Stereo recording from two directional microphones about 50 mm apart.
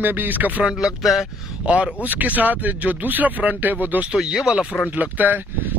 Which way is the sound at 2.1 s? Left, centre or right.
Right.